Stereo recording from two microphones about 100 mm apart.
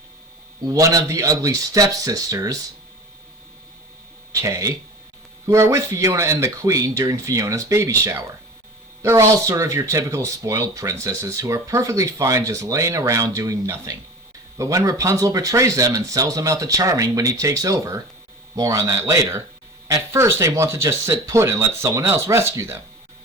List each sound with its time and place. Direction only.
0.6 s speech: 35° right (ahead or behind)
4.3 s speech: 35° right (ahead or behind)